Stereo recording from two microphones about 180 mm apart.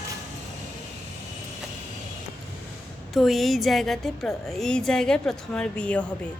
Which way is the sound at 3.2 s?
Centre (ahead or behind).